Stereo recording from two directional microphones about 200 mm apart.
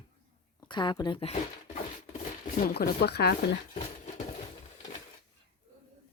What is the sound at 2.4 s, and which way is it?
Speech, 45° left (ahead or behind).